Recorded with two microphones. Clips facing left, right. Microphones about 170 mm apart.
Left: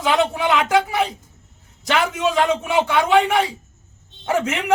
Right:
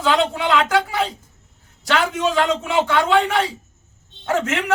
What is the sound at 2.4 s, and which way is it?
A man's voice, 20° left (ahead or behind).